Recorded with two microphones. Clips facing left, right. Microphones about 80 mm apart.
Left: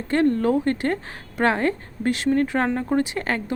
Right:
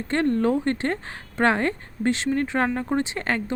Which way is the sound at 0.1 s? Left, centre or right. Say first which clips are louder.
Left 2 dB; right.